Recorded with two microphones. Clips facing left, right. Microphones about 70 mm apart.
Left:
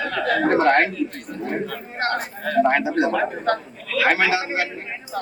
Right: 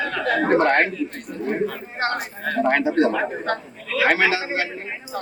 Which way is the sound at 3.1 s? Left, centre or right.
Centre.